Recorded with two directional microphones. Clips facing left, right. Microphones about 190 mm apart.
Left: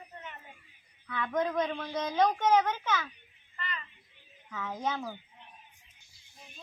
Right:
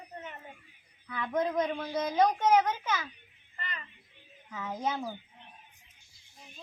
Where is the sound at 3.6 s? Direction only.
45° right (ahead or behind).